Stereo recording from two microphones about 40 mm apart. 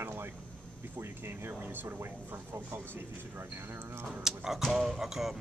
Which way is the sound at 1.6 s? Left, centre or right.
Right.